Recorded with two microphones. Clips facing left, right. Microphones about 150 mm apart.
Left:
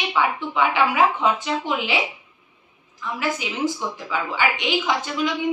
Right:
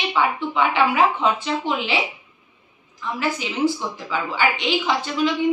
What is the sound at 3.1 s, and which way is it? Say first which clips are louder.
A woman's voice: right 2 dB; 10° left (ahead or behind).